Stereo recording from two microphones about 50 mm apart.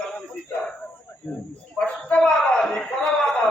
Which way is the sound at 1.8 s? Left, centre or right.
Left.